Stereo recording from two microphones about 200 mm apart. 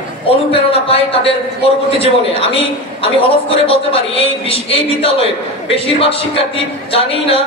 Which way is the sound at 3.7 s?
30° left (ahead or behind).